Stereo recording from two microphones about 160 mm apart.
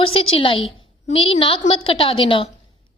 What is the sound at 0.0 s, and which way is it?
A woman's voice, 35° left (ahead or behind).